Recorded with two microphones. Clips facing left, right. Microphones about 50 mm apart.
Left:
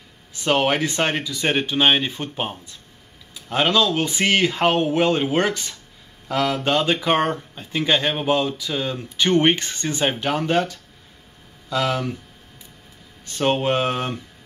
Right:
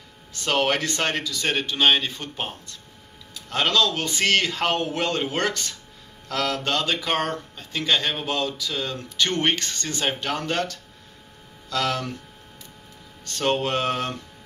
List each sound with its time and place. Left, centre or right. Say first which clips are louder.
0.3 s speech: left 3 dB; centre
13.2 s speech: left 3 dB; centre